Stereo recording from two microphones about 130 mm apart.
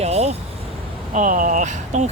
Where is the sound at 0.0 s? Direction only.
55° right (ahead or behind).